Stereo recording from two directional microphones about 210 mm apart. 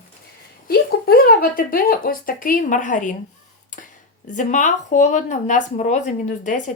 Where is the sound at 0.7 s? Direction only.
45° left (ahead or behind).